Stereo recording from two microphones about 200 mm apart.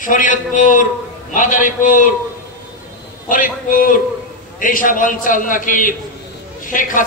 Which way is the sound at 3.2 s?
45° left (ahead or behind).